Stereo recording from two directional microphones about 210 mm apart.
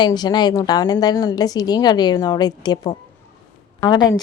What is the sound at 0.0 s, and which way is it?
A woman's voice, 20° left (ahead or behind).